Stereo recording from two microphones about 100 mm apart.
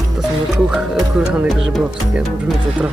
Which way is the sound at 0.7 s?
5° right (ahead or behind).